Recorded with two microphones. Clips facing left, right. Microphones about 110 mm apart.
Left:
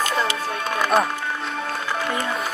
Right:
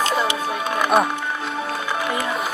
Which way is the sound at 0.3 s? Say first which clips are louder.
Right 2 dB; 15° right (ahead or behind).